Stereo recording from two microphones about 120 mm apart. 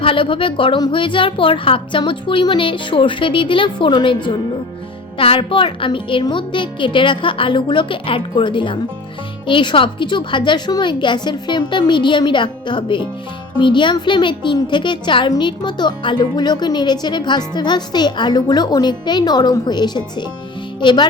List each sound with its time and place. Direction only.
0.0 s a woman's voice: 45° left (ahead or behind)